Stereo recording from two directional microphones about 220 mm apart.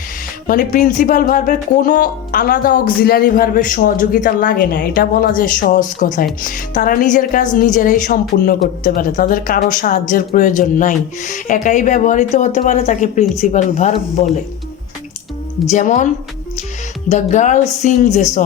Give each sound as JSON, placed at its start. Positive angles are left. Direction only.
{"t": 0.4, "sound": "speech", "side_deg": 40}
{"t": 15.7, "sound": "speech", "side_deg": 35}